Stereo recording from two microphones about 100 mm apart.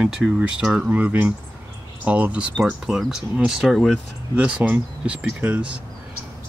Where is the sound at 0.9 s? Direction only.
15° right (ahead or behind).